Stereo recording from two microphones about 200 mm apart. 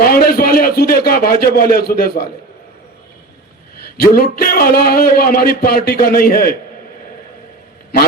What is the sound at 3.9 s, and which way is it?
A man's voice, 50° left (ahead or behind).